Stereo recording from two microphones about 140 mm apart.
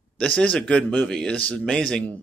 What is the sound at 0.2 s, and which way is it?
Speech, 10° left (ahead or behind).